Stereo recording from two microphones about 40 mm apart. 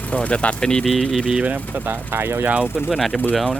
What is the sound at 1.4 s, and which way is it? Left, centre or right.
Speech, right.